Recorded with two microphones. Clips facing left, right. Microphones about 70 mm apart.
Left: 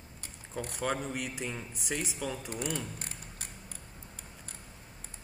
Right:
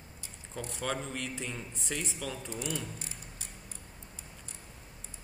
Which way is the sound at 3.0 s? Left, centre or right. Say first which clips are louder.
Left 2 dB; left.